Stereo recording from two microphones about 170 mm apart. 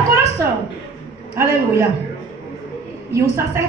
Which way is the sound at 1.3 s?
15° right (ahead or behind).